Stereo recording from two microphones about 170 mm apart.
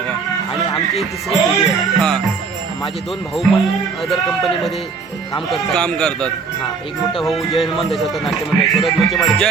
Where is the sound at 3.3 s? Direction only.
Centre (ahead or behind).